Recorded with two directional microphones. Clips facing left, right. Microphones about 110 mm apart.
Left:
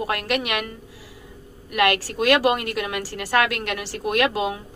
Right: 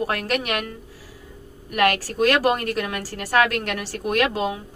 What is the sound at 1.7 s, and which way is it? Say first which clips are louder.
A woman's voice: even; 40° right (ahead or behind).